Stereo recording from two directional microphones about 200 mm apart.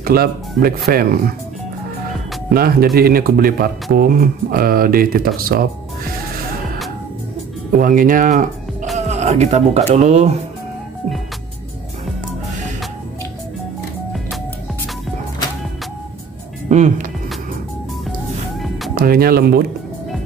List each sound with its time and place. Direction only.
0.0 s speech: 50° right (ahead or behind)
2.5 s speech: 50° right (ahead or behind)
7.7 s speech: 45° right (ahead or behind)
16.6 s speech: 35° right (ahead or behind)
18.9 s speech: 50° right (ahead or behind)